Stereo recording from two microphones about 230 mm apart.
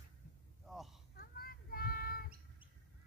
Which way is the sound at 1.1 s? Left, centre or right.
Left.